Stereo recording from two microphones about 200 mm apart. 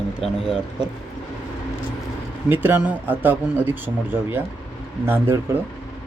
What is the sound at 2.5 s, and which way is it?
Speech, 10° right (ahead or behind).